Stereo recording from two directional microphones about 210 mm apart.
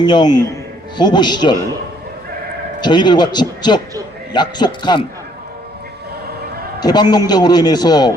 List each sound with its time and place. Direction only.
0.0 s a man's voice: 20° left (ahead or behind)
2.8 s a man's voice: 20° left (ahead or behind)
6.7 s a man's voice: 20° left (ahead or behind)